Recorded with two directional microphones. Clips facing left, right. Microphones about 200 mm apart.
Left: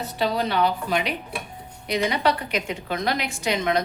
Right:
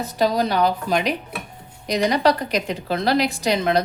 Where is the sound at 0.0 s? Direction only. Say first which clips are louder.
Right 4 dB; 40° right (ahead or behind).